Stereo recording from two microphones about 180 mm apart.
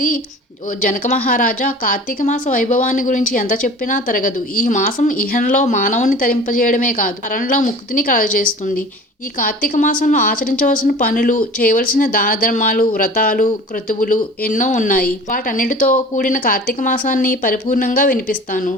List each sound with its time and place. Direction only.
0.8 s speech: 45° left (ahead or behind)